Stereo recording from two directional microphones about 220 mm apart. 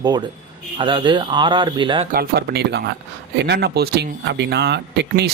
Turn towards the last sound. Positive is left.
turn(degrees=-50)  # may be behind; listen again after turning